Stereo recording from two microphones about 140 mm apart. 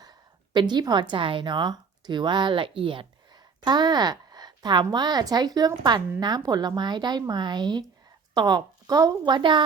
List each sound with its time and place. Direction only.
0.5 s a woman's voice: 30° right (ahead or behind)